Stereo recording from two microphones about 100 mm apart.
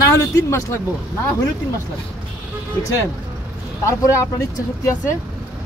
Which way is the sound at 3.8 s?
30° left (ahead or behind).